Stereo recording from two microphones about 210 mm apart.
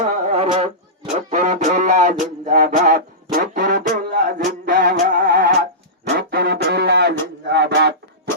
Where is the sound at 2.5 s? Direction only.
40° right (ahead or behind).